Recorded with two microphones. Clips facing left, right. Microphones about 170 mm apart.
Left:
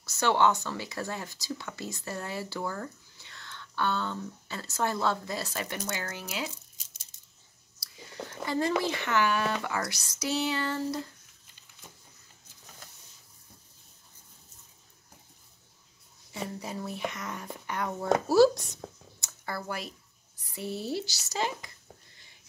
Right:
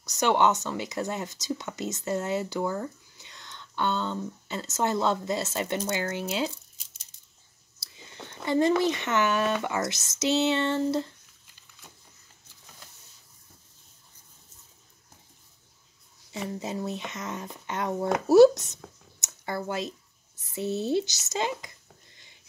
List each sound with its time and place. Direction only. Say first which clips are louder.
0.0 s speech: right 2 dB; 20° right (ahead or behind)
7.8 s speech: left 4 dB; 25° right (ahead or behind)
16.3 s speech: right 4 dB; 20° right (ahead or behind)
19.1 s a sound: right 6 dB; 20° right (ahead or behind)
20.3 s speech: right 6 dB; 20° right (ahead or behind)